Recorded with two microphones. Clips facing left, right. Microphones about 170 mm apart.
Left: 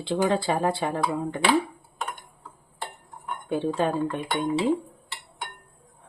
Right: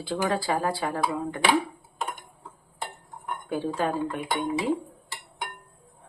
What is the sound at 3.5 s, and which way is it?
Speech, 25° left (ahead or behind).